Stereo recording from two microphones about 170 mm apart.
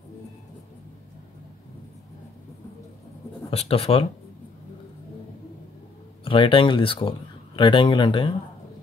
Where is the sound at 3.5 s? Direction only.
35° left (ahead or behind).